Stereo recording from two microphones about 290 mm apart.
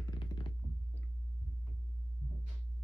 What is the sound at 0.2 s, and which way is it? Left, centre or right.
Computer keyboard, centre.